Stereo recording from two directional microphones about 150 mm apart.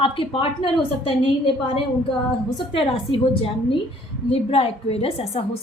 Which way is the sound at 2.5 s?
40° left (ahead or behind).